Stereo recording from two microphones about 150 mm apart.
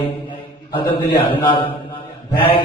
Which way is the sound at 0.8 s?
85° left.